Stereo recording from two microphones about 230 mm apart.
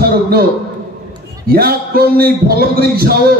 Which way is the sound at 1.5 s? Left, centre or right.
Right.